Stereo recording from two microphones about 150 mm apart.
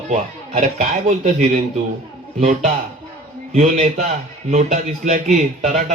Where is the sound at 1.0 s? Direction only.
55° right (ahead or behind).